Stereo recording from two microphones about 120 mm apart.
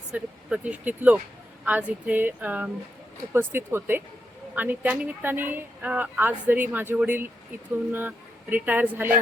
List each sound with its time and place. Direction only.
0.1 s speech: 10° right (ahead or behind)